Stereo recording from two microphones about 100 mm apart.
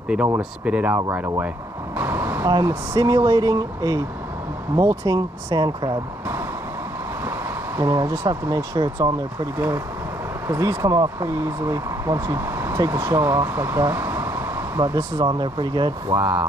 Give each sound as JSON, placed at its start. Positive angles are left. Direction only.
{"t": 0.4, "sound": "speech", "side_deg": -10}
{"t": 0.9, "sound": "speech", "side_deg": -25}
{"t": 2.0, "sound": "vehicle", "side_deg": -20}
{"t": 2.4, "sound": "speech", "side_deg": -40}
{"t": 7.2, "sound": "a sound", "side_deg": -25}
{"t": 8.7, "sound": "speech", "side_deg": -45}
{"t": 10.5, "sound": "speech", "side_deg": -30}
{"t": 14.8, "sound": "speech", "side_deg": -35}
{"t": 15.2, "sound": "speech", "side_deg": -50}
{"t": 16.2, "sound": "speech", "side_deg": -20}